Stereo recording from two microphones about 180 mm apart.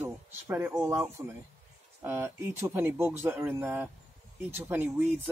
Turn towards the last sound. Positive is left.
turn(degrees=-10)  # may be behind; listen again after turning